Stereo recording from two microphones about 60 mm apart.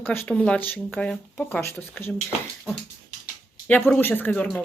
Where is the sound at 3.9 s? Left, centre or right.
Left.